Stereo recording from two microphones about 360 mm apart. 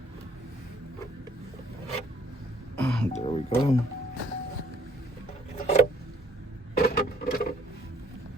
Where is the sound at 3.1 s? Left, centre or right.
Centre.